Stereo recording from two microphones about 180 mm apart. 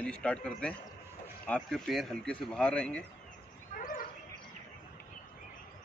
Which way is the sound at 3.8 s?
45° left (ahead or behind).